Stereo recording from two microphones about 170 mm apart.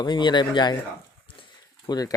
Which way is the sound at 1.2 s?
25° left (ahead or behind).